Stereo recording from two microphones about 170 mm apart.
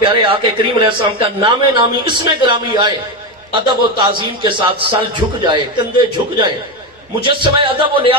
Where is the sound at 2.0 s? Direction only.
30° right (ahead or behind).